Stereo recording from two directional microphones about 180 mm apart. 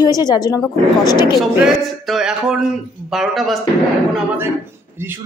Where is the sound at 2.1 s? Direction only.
5° right (ahead or behind).